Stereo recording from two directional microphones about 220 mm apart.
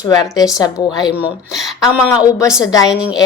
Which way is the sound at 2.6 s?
15° left (ahead or behind).